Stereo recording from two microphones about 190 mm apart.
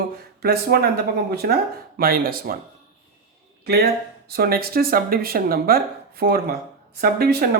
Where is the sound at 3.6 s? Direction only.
55° right (ahead or behind).